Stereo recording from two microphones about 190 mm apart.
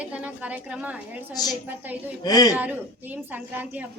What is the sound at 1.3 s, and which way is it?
Speech, 20° left (ahead or behind).